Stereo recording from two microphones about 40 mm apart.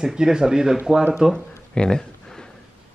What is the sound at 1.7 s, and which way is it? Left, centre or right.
Speech, left.